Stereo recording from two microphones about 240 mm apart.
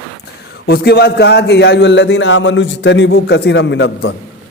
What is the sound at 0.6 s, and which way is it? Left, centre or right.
A man's voice, left.